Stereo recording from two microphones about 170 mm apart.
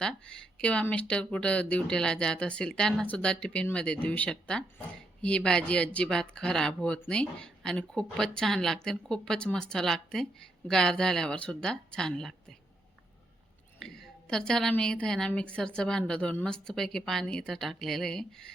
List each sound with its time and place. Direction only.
0.0 s speech: 5° left (ahead or behind)
13.7 s speech: 5° left (ahead or behind)